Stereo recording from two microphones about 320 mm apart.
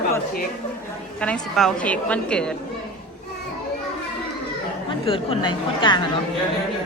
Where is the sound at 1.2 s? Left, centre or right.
Centre.